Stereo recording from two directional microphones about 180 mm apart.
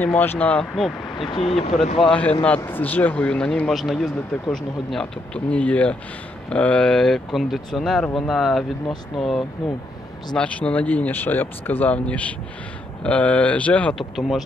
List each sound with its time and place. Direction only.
0.0 s a man's voice: 10° left (ahead or behind)
1.1 s speech: 25° left (ahead or behind)
2.0 s a man's voice: 10° left (ahead or behind)